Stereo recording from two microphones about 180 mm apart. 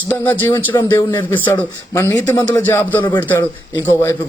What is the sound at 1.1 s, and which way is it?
Speech, 10° left (ahead or behind).